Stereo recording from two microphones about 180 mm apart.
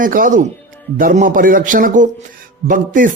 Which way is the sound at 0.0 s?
50° right (ahead or behind).